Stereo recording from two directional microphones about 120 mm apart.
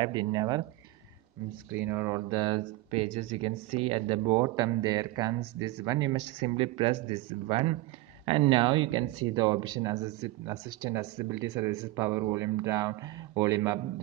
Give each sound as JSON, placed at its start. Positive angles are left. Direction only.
{"t": 0.0, "sound": "speech", "side_deg": -40}
{"t": 1.7, "sound": "speech", "side_deg": -20}
{"t": 2.2, "sound": "speech", "side_deg": -35}
{"t": 4.4, "sound": "speech", "side_deg": -30}
{"t": 6.5, "sound": "speech", "side_deg": -50}
{"t": 9.3, "sound": "speech", "side_deg": -35}